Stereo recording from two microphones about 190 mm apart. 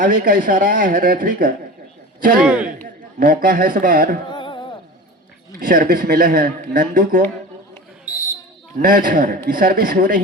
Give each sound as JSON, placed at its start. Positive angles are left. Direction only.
{"t": 0.0, "sound": "a man's voice", "side_deg": -45}
{"t": 2.4, "sound": "a man's voice", "side_deg": -5}
{"t": 3.0, "sound": "a man's voice", "side_deg": -50}
{"t": 4.3, "sound": "a sound", "side_deg": 25}
{"t": 5.6, "sound": "a man's voice", "side_deg": -50}
{"t": 8.8, "sound": "a man's voice", "side_deg": -50}